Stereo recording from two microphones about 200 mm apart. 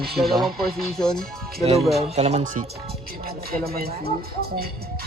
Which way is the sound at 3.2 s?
50° right (ahead or behind).